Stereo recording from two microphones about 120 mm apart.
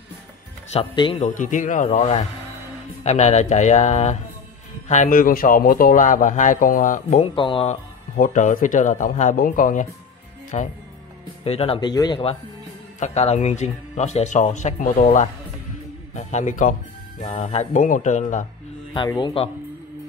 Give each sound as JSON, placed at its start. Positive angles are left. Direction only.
{"t": 0.7, "sound": "speech", "side_deg": 45}
{"t": 1.2, "sound": "speech", "side_deg": 90}
{"t": 3.0, "sound": "speech", "side_deg": 65}
{"t": 4.8, "sound": "speech", "side_deg": 80}
{"t": 5.9, "sound": "speech", "side_deg": 90}
{"t": 7.3, "sound": "speech", "side_deg": 45}
{"t": 8.3, "sound": "speech", "side_deg": 90}
{"t": 10.5, "sound": "speech", "side_deg": 70}
{"t": 11.4, "sound": "speech", "side_deg": 55}
{"t": 11.9, "sound": "speech", "side_deg": 35}
{"t": 13.0, "sound": "speech", "side_deg": 65}
{"t": 17.3, "sound": "speech", "side_deg": 60}
{"t": 18.9, "sound": "speech", "side_deg": 40}